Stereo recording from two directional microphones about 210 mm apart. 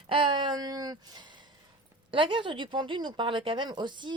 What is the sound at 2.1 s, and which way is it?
Speech, 25° right (ahead or behind).